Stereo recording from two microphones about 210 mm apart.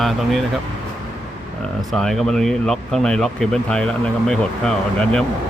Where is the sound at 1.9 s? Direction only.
Centre (ahead or behind).